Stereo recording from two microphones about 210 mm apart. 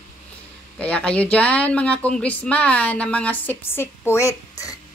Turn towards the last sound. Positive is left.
turn(degrees=15)  # may be behind; listen again after turning